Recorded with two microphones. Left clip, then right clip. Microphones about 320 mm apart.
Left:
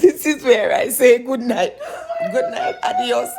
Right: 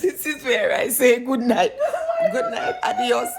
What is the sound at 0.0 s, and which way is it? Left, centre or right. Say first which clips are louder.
Speech: left 9 dB; left.